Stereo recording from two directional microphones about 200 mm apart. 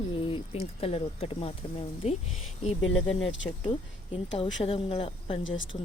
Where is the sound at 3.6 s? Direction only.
25° left (ahead or behind).